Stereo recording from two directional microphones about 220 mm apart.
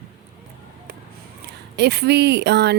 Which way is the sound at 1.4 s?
50° right (ahead or behind).